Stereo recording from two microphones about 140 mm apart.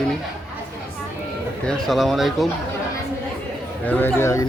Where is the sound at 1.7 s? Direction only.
Centre (ahead or behind).